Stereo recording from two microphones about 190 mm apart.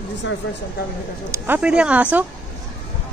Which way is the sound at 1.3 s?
10° right (ahead or behind).